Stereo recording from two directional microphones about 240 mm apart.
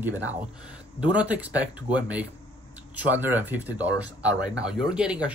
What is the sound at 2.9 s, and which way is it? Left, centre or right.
Speech, centre.